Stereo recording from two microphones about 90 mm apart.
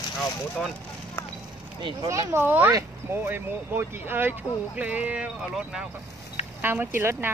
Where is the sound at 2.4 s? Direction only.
20° right (ahead or behind).